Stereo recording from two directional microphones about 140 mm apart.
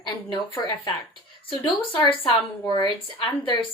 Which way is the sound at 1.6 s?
35° left (ahead or behind).